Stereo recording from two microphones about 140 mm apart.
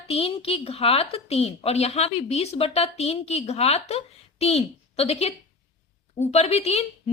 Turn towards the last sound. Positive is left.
turn(degrees=50)  # may be behind; listen again after turning